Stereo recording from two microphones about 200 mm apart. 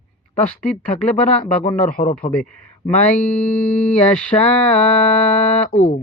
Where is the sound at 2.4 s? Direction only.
5° left (ahead or behind).